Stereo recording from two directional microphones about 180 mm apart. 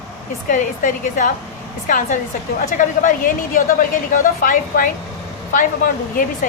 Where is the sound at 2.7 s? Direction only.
45° left (ahead or behind).